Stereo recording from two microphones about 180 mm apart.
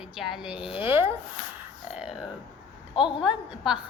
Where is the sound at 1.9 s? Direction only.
5° right (ahead or behind).